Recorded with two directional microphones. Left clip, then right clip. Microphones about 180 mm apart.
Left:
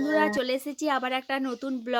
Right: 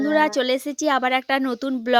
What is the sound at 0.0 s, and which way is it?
Speech, 45° right (ahead or behind).